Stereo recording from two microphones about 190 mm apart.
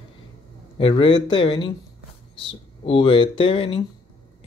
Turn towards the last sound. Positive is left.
turn(degrees=30)  # may be behind; listen again after turning